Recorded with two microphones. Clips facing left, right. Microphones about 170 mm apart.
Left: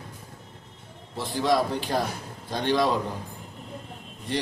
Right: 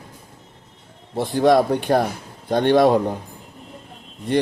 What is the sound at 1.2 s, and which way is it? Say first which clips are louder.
A man's voice: right 8 dB; 60° right (ahead or behind).